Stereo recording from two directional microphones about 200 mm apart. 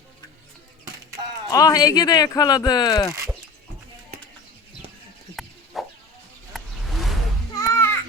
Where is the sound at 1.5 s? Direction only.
15° left (ahead or behind).